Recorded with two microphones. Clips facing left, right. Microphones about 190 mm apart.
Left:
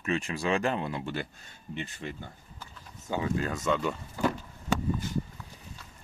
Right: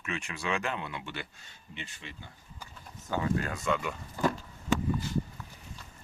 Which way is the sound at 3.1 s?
20° left (ahead or behind).